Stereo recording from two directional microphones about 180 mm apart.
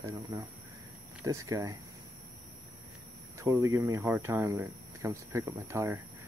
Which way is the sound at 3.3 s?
15° right (ahead or behind).